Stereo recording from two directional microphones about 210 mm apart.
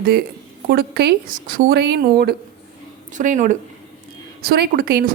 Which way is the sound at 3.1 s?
40° right (ahead or behind).